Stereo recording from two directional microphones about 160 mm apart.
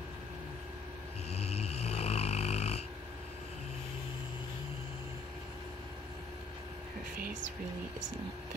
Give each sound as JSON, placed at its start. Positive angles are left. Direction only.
{"t": 1.3, "sound": "snoring", "side_deg": 40}